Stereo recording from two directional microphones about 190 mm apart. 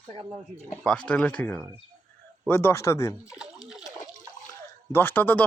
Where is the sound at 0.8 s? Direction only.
5° left (ahead or behind).